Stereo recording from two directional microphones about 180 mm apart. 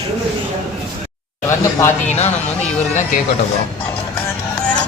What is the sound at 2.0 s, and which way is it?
Speech, 35° left (ahead or behind).